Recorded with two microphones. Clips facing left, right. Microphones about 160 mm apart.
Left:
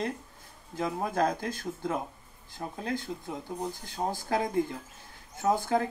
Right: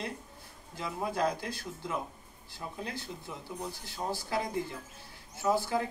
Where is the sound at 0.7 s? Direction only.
45° left (ahead or behind).